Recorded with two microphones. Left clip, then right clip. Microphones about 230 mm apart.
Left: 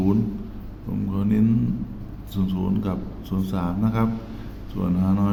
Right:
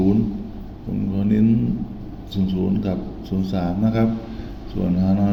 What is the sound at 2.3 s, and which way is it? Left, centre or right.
Speech, centre.